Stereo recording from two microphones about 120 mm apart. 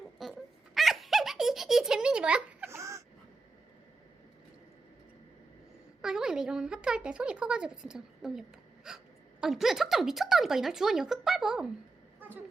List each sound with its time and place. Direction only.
0.2 s giggle: centre (ahead or behind)
2.6 s a sound: 25° right (ahead or behind)
6.0 s a woman's voice: 5° right (ahead or behind)